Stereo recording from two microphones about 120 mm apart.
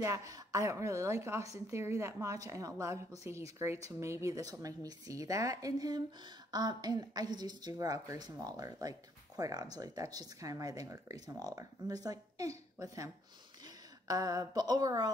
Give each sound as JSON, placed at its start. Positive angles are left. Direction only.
{"t": 0.0, "sound": "a woman's voice", "side_deg": -25}